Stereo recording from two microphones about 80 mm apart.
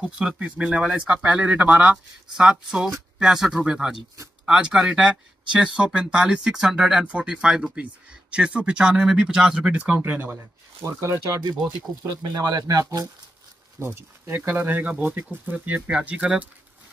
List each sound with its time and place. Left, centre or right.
0.0 s speech: centre
3.2 s speech: centre; by 11.3 s right
12.2 s speech: right
13.7 s speech: right; by 16.4 s centre